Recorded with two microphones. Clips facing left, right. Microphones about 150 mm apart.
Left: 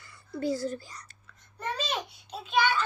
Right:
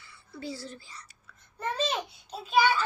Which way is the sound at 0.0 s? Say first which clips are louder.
Left 8 dB; 45° left (ahead or behind).